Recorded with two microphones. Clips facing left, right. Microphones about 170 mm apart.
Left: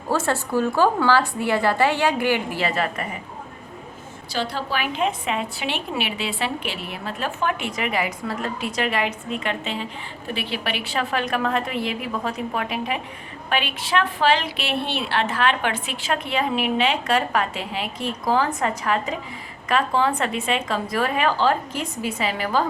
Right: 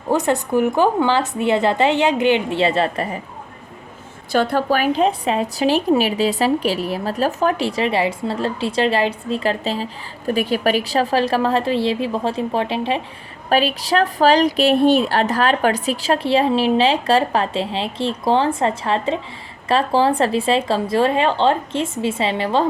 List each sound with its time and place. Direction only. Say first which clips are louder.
0.1 s a woman's voice: right 5 dB; 20° right (ahead or behind)
4.3 s a woman's voice: right 9 dB; 55° right (ahead or behind); by 22.6 s 25° right (ahead or behind)